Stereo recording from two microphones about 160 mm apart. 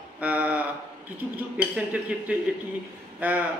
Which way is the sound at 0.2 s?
10° right (ahead or behind).